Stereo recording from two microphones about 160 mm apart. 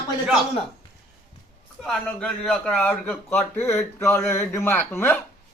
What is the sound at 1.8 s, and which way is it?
A man's voice, 5° left (ahead or behind).